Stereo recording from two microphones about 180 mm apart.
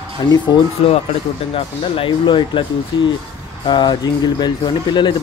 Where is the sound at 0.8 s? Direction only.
35° left (ahead or behind).